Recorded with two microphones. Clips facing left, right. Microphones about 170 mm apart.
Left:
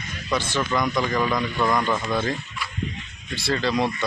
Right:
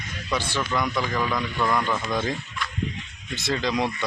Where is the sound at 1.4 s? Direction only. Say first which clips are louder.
Left 2 dB; 10° left (ahead or behind).